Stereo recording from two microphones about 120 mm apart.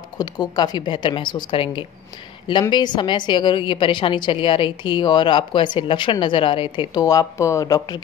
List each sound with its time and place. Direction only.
0.2 s a woman's voice: 35° left (ahead or behind)
7.0 s speech: 30° left (ahead or behind)